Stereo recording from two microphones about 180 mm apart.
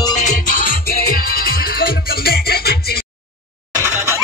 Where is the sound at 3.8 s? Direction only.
15° right (ahead or behind).